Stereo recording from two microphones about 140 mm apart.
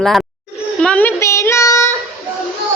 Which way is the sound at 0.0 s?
Centre (ahead or behind).